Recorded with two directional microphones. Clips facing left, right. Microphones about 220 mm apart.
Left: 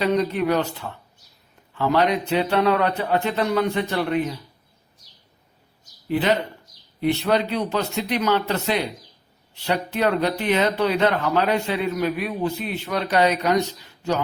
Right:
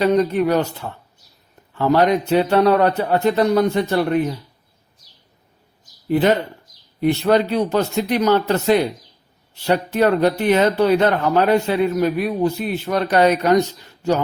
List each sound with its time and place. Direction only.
0.0 s speech: 45° right (ahead or behind)
6.1 s speech: 45° right (ahead or behind)